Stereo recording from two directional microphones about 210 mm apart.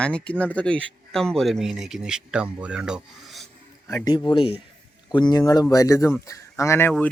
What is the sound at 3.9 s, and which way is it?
Speech, 15° left (ahead or behind).